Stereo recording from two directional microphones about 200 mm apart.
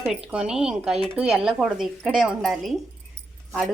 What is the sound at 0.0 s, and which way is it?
Speech, 5° right (ahead or behind).